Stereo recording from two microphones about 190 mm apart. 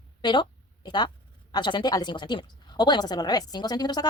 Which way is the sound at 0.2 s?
25° left (ahead or behind).